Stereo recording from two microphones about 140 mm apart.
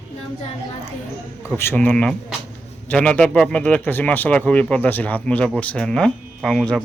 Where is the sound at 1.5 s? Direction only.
15° left (ahead or behind).